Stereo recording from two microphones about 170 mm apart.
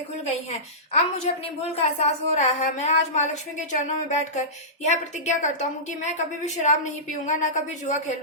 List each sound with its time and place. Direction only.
0.9 s a woman's voice: 40° left (ahead or behind)